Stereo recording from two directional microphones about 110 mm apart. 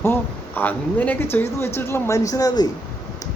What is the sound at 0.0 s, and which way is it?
A man's voice, 20° left (ahead or behind).